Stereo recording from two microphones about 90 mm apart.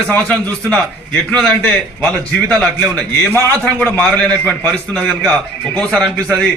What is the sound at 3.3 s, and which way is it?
A man's voice, 20° left (ahead or behind).